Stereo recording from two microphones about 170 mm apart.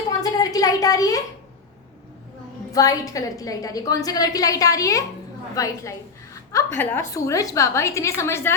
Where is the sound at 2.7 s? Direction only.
20° left (ahead or behind).